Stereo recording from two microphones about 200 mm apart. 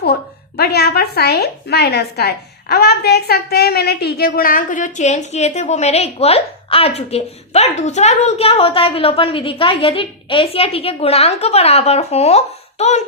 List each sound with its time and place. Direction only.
0.5 s a woman's voice: 55° left (ahead or behind); by 12.9 s 35° left (ahead or behind)